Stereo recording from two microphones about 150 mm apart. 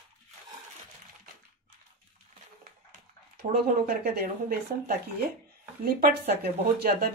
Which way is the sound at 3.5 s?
80° right.